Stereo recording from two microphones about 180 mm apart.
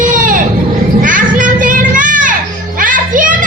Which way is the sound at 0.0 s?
50° right (ahead or behind).